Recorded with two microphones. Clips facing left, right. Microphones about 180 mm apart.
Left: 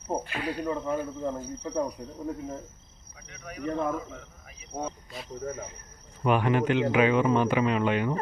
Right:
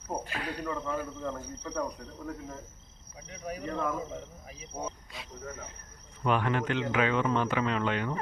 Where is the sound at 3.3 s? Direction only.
35° right (ahead or behind).